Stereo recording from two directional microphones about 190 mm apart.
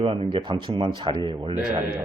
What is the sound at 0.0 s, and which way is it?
Speech, 30° right (ahead or behind).